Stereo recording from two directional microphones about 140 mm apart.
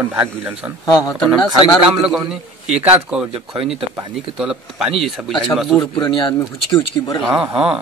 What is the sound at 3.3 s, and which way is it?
Speech, 45° right (ahead or behind).